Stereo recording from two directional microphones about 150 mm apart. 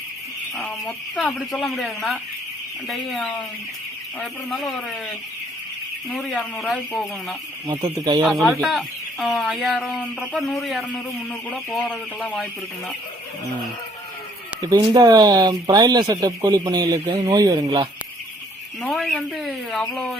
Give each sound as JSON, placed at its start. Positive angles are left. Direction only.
{"t": 0.5, "sound": "speech", "side_deg": 0}
{"t": 6.1, "sound": "speech", "side_deg": 0}
{"t": 7.7, "sound": "speech", "side_deg": -30}
{"t": 8.2, "sound": "speech", "side_deg": 0}
{"t": 14.7, "sound": "speech", "side_deg": -25}
{"t": 18.8, "sound": "speech", "side_deg": 0}